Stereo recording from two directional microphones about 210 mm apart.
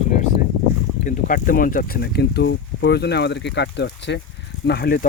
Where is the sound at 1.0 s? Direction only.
40° left (ahead or behind).